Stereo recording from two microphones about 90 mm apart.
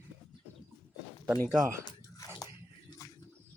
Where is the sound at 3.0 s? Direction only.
35° left (ahead or behind).